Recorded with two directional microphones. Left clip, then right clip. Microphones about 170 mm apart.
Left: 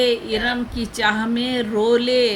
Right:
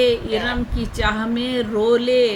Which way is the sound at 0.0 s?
15° left (ahead or behind).